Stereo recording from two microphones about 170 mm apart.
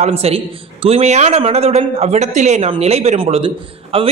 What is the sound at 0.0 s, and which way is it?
A man's voice, 35° right (ahead or behind).